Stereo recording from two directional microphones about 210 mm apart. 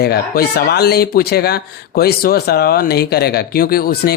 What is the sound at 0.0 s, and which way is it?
Speech, 50° left (ahead or behind).